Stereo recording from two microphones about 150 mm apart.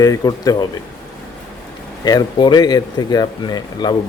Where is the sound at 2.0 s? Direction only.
25° left (ahead or behind).